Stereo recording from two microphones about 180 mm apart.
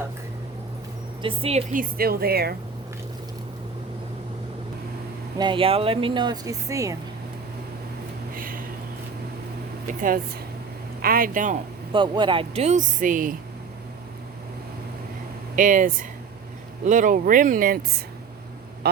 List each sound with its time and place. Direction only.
1.2 s speech: 30° right (ahead or behind)
1.7 s speech: 55° right (ahead or behind)
5.4 s speech: 30° right (ahead or behind)
8.4 s a sound: 50° right (ahead or behind)
9.8 s speech: 50° right (ahead or behind)
11.9 s speech: 25° right (ahead or behind); by 13.3 s 50° right (ahead or behind)
15.5 s speech: 45° right (ahead or behind)